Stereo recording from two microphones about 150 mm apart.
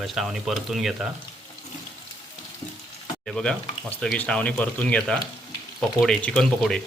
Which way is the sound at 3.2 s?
5° left (ahead or behind).